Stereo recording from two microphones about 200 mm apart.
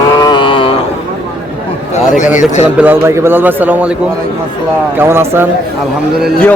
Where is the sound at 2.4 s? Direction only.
35° left (ahead or behind).